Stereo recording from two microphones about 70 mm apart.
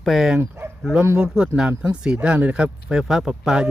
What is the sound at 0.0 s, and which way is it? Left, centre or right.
Speech, centre.